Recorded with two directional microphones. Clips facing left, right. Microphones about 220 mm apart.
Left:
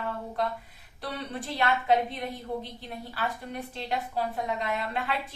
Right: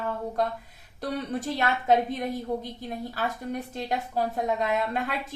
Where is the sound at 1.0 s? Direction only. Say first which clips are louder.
Right 5 dB; 45° right (ahead or behind).